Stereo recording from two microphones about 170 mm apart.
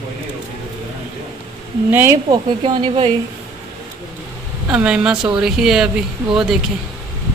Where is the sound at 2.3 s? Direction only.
30° right (ahead or behind).